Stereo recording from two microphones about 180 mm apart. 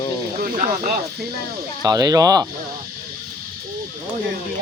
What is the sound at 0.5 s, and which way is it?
Speech, 50° right (ahead or behind).